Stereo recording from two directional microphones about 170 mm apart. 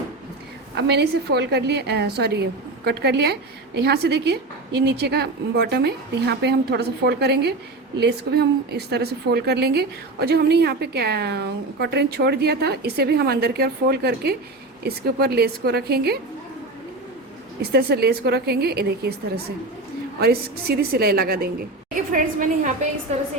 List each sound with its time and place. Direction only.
0.8 s a woman's voice: 80° right
17.6 s a woman's voice: 70° right (ahead or behind)
20.2 s a woman's voice: 65° right (ahead or behind); by 23.2 s 40° right (ahead or behind)